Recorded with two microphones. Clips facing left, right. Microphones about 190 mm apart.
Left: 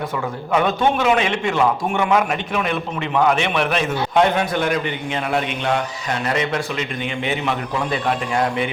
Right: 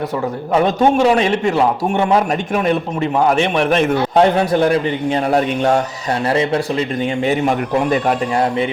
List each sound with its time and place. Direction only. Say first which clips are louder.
0.5 s a man's voice: right 4 dB; 35° right (ahead or behind)
4.1 s a man's voice: right 3 dB; 35° right (ahead or behind)